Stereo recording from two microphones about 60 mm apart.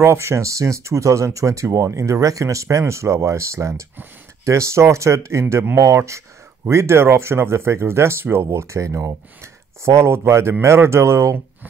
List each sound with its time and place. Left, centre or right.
0.0 s speech: right